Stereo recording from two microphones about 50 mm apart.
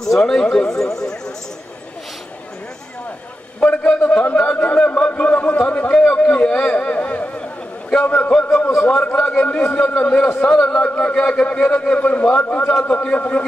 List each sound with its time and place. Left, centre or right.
0.0 s speech: centre
3.6 s a man's voice: left
5.9 s a man's voice: centre